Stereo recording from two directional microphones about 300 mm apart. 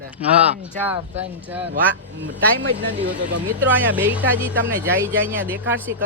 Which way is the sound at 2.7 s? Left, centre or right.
Right.